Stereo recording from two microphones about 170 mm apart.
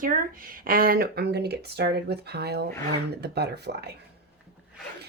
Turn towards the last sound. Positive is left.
turn(degrees=-75)  # may be behind; listen again after turning